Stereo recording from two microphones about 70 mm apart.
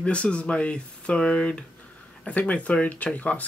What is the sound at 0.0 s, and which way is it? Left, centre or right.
Speech, centre.